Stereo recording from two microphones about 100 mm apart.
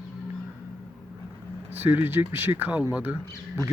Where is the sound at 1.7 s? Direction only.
20° right (ahead or behind).